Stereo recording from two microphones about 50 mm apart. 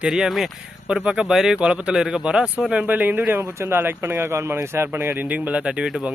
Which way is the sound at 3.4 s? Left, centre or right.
Right.